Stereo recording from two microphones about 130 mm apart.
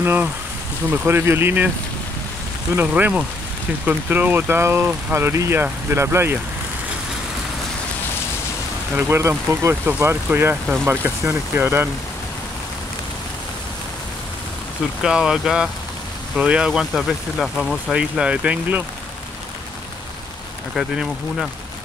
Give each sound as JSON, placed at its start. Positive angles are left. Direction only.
{"t": 0.0, "sound": "speech", "side_deg": -15}
{"t": 2.7, "sound": "speech", "side_deg": -15}
{"t": 8.9, "sound": "speech", "side_deg": -15}
{"t": 15.0, "sound": "speech", "side_deg": -5}
{"t": 20.7, "sound": "speech", "side_deg": -5}